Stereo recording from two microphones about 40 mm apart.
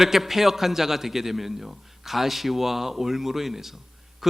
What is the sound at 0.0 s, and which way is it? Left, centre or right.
Speech, centre.